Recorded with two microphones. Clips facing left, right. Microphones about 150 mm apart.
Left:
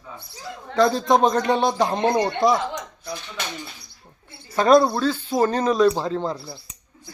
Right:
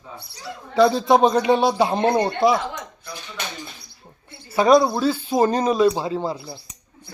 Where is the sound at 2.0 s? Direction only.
30° right (ahead or behind).